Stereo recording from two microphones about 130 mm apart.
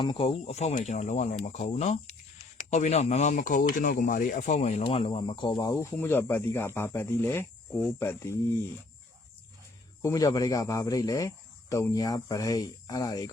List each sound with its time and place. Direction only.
0.0 s speech: 40° left (ahead or behind)
5.7 s speech: 20° left (ahead or behind)
10.0 s speech: 20° left (ahead or behind)